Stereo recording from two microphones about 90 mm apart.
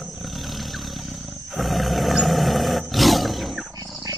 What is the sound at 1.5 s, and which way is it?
Roar, centre (ahead or behind).